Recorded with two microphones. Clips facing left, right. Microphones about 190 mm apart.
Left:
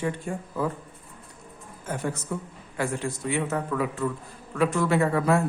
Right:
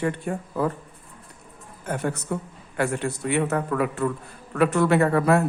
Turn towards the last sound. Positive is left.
turn(degrees=-60)  # may be behind; listen again after turning